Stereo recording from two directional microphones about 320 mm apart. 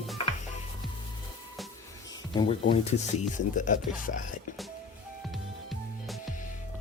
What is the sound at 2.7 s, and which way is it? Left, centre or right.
Speech, left.